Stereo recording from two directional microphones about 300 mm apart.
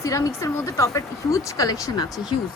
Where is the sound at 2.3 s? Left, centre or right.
Left.